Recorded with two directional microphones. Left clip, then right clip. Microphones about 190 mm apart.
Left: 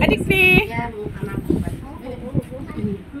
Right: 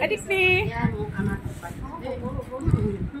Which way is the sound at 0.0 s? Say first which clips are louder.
Left 6 dB; centre (ahead or behind).